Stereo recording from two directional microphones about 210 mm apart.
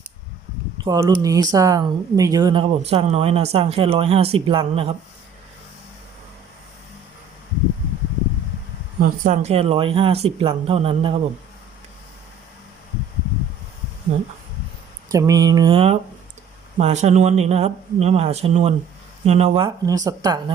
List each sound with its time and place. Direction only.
0.9 s mantra: 15° right (ahead or behind)
1.5 s speech: 15° right (ahead or behind)
9.2 s speech: 35° right (ahead or behind)
15.1 s mantra: 15° right (ahead or behind)
16.7 s speech: 35° right (ahead or behind); by 20.4 s 15° right (ahead or behind)